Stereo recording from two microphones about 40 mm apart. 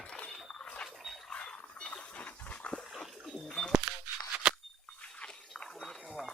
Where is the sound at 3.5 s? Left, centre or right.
Centre.